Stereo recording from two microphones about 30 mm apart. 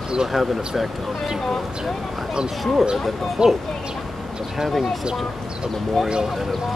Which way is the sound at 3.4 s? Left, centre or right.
Right.